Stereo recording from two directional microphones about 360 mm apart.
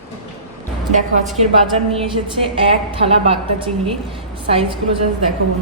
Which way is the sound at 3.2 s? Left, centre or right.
Centre.